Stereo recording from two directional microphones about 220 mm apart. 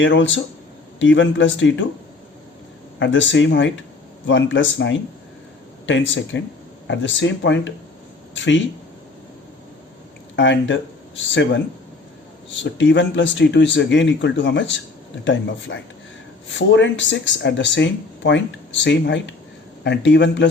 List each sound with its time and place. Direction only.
0.0 s speech: 55° left (ahead or behind)
3.0 s speech: 55° left (ahead or behind)
10.3 s speech: 55° left (ahead or behind)
12.7 s speech: 55° left (ahead or behind)